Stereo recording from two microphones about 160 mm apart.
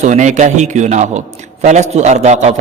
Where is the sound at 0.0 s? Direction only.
50° right (ahead or behind).